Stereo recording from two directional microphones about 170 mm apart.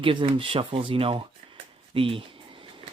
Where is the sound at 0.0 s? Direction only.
30° right (ahead or behind).